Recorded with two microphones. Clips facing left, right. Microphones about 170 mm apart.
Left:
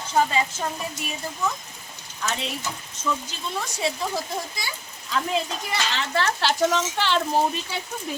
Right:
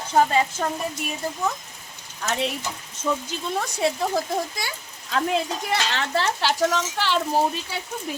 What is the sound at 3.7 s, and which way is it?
Speech, 55° right (ahead or behind).